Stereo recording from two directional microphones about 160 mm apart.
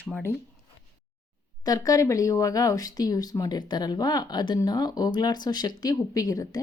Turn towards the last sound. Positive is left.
turn(degrees=20)  # may be behind; listen again after turning